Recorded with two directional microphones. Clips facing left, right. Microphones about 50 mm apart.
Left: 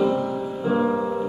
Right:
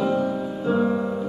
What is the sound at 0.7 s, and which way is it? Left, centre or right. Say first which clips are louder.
Music: even; centre.